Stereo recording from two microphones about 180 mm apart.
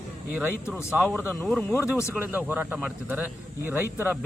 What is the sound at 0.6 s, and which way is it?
Speech, 15° left (ahead or behind).